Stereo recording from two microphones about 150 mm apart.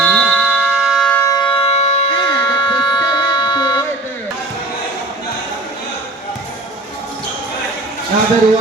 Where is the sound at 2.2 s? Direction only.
30° left (ahead or behind).